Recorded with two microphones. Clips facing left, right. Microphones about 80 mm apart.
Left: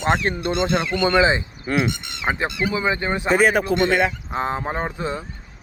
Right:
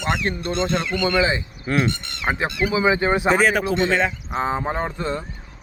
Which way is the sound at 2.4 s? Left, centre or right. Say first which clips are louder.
Right 1 dB; centre.